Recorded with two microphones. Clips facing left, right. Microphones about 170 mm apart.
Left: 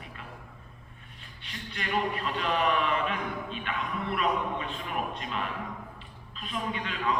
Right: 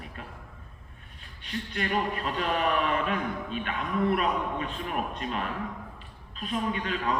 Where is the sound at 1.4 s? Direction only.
40° right (ahead or behind).